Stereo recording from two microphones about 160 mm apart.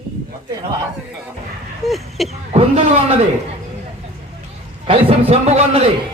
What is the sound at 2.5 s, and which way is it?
Speech, 40° right (ahead or behind).